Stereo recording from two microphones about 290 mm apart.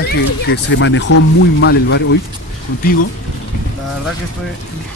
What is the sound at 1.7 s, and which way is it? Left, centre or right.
Speech, left.